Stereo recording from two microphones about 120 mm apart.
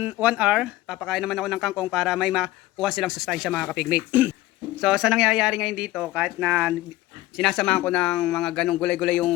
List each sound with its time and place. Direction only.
0.0 s speech: 10° right (ahead or behind)
3.8 s speech: 10° right (ahead or behind)
7.3 s speech: centre (ahead or behind)